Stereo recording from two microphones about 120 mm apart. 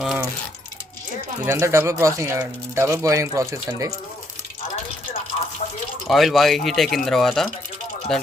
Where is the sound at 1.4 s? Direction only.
20° right (ahead or behind).